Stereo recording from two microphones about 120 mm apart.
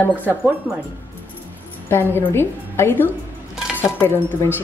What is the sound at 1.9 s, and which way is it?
A woman's voice, 20° left (ahead or behind).